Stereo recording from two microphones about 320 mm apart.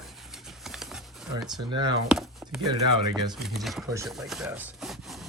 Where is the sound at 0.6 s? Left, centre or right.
Centre.